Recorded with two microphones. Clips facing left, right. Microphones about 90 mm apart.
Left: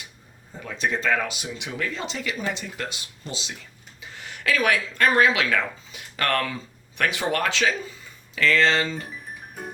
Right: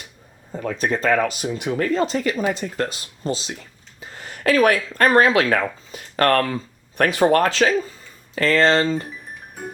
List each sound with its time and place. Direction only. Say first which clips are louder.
0.5 s speech: right 4 dB; 40° right (ahead or behind)
9.6 s music: right 3 dB; centre (ahead or behind)